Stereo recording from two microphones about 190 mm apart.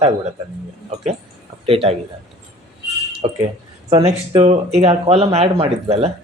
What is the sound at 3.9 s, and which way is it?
Speech, 30° right (ahead or behind).